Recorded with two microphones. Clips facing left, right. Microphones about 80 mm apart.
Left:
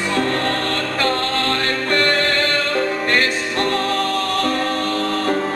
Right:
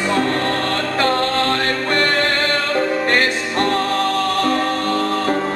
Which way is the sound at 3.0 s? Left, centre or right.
Right.